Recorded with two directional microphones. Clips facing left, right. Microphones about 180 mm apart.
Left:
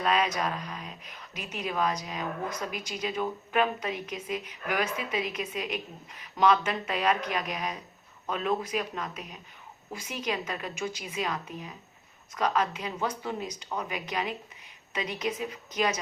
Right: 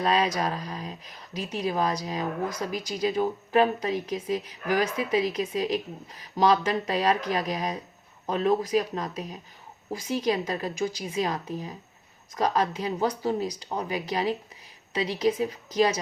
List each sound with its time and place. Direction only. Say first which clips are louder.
0.0 s speech: right 3 dB; 35° right (ahead or behind)